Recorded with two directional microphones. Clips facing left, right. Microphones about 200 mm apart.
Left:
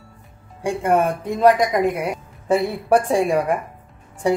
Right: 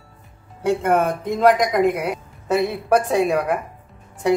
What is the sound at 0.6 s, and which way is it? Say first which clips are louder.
Speech: even; 10° left (ahead or behind).